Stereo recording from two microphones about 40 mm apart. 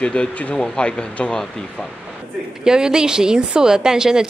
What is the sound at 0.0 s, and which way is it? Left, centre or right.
Speech, left.